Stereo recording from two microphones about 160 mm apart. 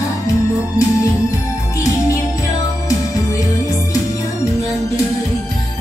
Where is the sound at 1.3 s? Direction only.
20° left (ahead or behind).